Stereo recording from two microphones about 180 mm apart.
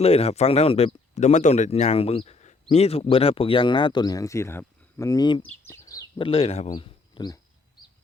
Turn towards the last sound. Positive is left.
turn(degrees=25)  # may be behind; listen again after turning